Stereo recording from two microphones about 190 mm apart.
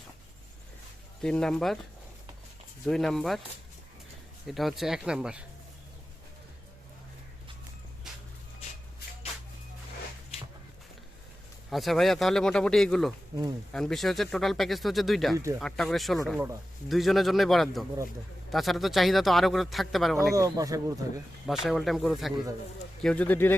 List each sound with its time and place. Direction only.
1.2 s speech: 5° left (ahead or behind)
2.8 s speech: centre (ahead or behind)
4.4 s speech: centre (ahead or behind)
11.7 s speech: centre (ahead or behind)
20.3 s speech: 20° right (ahead or behind)
21.4 s speech: centre (ahead or behind)